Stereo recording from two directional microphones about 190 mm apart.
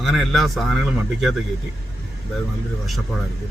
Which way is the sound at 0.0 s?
Centre (ahead or behind).